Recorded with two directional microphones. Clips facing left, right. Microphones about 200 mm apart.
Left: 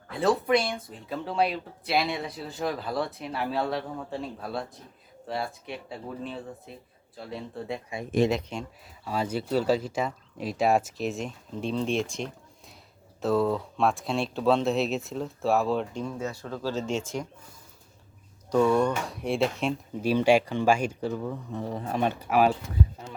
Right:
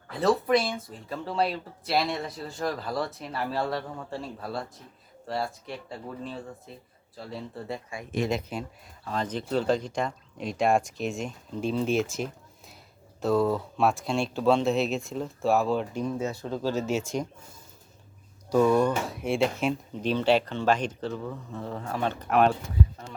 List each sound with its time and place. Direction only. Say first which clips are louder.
0.1 s speech: even; centre (ahead or behind)
9.0 s speech: left 2 dB; 10° left (ahead or behind)
16.0 s speech: right 3 dB; 20° right (ahead or behind)
16.7 s speech: right 2 dB; 10° right (ahead or behind)
18.5 s speech: right 1 dB; 5° right (ahead or behind)